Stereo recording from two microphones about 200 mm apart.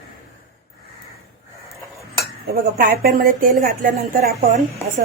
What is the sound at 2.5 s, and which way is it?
A woman's voice, 50° right (ahead or behind).